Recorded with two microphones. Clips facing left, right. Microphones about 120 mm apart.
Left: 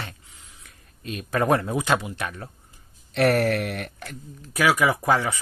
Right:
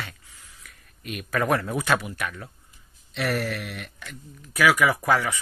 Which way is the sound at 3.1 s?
55° left (ahead or behind).